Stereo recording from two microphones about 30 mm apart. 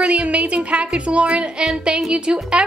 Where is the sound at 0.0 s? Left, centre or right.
Right.